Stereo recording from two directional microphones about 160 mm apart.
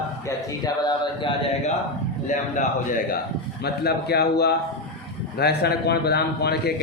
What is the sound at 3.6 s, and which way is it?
A man's voice, 90° left.